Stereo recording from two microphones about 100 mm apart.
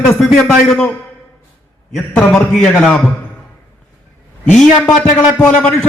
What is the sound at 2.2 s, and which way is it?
Speech, 20° left (ahead or behind).